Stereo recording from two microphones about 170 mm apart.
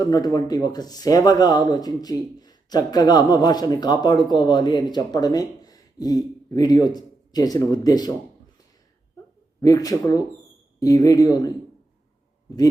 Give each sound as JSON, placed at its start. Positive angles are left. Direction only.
{"t": 0.0, "sound": "speech", "side_deg": 25}
{"t": 9.6, "sound": "speech", "side_deg": 20}